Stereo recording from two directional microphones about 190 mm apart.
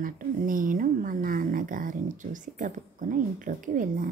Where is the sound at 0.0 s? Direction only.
45° right (ahead or behind).